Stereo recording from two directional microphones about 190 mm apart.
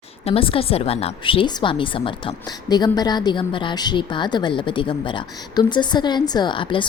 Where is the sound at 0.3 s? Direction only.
30° left (ahead or behind).